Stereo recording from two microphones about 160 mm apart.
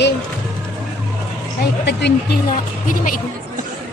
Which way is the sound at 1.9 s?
90° left.